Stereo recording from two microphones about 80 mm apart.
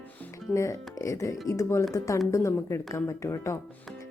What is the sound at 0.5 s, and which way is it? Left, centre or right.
A woman's voice, left.